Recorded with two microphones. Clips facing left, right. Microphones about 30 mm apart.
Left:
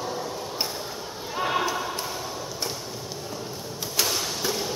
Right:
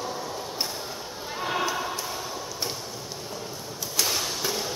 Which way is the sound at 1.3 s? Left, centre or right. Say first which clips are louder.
Left 3 dB; centre.